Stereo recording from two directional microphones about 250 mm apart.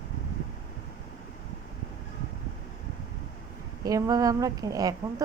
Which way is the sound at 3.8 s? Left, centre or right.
Centre.